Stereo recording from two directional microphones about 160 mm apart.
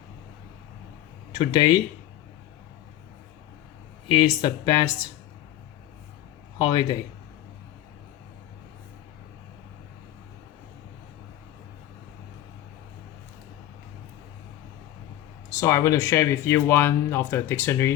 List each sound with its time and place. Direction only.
1.3 s speech: 30° left (ahead or behind)
4.1 s speech: 25° left (ahead or behind)
6.6 s speech: 25° left (ahead or behind)
15.4 s speech: 20° left (ahead or behind)